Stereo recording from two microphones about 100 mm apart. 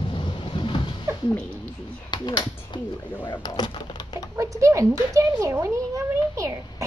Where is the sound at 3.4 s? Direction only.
45° left (ahead or behind).